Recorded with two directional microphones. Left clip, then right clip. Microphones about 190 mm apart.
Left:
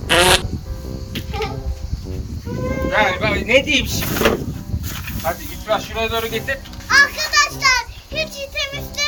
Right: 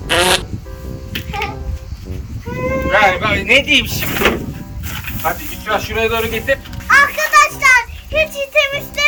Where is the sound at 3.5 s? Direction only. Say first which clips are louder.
Right 4 dB; 35° right (ahead or behind).